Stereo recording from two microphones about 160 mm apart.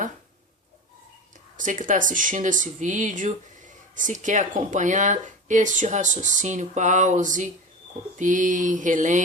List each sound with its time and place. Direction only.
1.5 s speech: 55° right (ahead or behind)